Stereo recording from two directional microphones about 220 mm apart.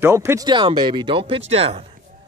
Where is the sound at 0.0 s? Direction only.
10° right (ahead or behind).